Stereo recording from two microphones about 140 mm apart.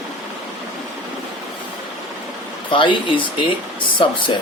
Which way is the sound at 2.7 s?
35° left (ahead or behind).